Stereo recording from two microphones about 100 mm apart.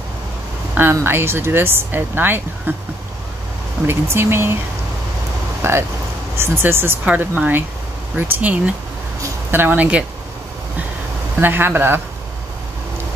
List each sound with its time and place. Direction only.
0.7 s speech: 25° right (ahead or behind)
3.8 s speech: 25° right (ahead or behind)
5.6 s speech: 25° right (ahead or behind)
11.4 s speech: 20° right (ahead or behind)